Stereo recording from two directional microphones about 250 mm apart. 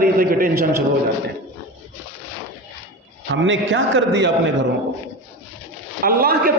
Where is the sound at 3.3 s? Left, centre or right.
Right.